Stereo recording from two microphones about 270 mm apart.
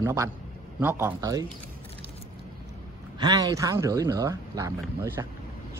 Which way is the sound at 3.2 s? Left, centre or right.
Centre.